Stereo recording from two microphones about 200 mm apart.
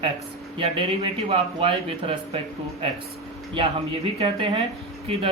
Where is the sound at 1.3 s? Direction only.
30° right (ahead or behind).